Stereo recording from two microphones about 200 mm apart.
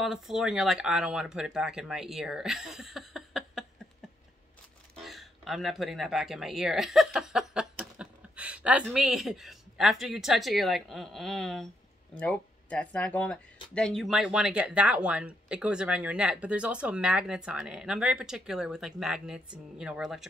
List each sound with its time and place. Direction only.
0.0 s speech: centre (ahead or behind)
5.0 s speech: centre (ahead or behind)